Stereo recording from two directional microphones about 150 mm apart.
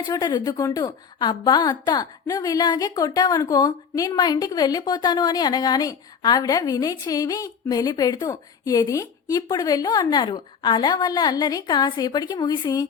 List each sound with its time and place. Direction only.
0.1 s a woman's voice: 25° left (ahead or behind)